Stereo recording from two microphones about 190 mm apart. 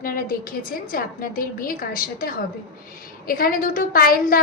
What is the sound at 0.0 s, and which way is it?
A woman's voice, 50° left (ahead or behind).